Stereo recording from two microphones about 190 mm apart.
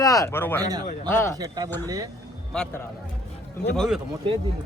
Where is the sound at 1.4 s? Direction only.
20° right (ahead or behind).